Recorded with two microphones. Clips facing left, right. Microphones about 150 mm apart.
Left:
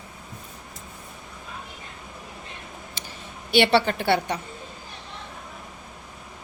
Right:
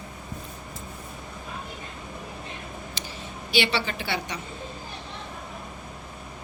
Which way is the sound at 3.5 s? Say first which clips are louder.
Left 7 dB; 60° left (ahead or behind).